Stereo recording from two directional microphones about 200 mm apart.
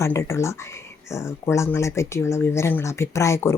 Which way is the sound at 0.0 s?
15° left (ahead or behind).